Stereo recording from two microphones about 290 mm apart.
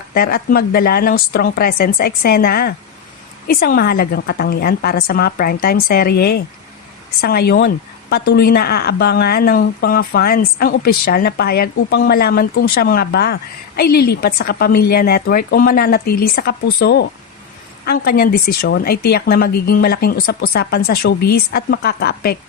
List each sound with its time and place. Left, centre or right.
0.1 s speech: left